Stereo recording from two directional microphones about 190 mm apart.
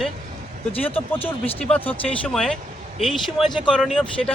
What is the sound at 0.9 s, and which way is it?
Speech, 30° left (ahead or behind).